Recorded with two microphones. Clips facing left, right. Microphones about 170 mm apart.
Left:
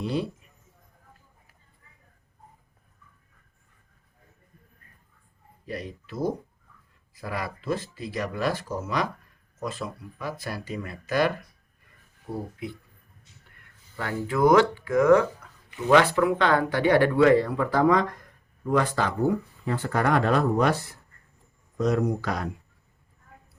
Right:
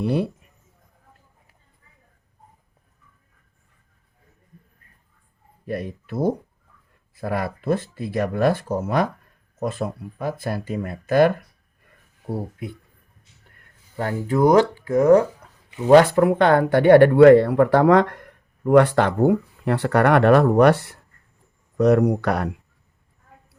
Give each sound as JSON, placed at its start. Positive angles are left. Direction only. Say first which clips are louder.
{"t": 0.0, "sound": "speech", "louder": "right 6 dB", "side_deg": -60}
{"t": 5.6, "sound": "speech", "louder": "right 7 dB", "side_deg": -55}
{"t": 13.9, "sound": "speech", "louder": "right 5 dB", "side_deg": -45}
{"t": 16.0, "sound": "speech", "louder": "right 6 dB", "side_deg": -45}